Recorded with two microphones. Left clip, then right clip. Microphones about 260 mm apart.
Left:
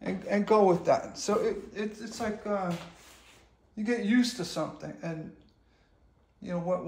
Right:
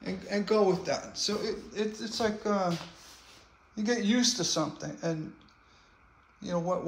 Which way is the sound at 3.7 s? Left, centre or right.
Right.